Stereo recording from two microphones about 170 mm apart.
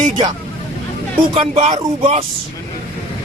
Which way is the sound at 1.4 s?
35° right (ahead or behind).